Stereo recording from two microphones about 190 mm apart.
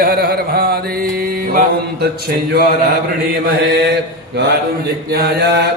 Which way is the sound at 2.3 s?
55° right (ahead or behind).